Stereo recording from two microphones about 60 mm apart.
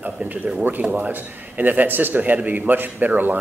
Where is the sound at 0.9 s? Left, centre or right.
Right.